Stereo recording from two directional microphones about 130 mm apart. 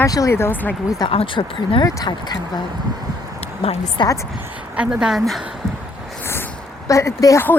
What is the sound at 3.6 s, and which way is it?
Speech, 55° left (ahead or behind).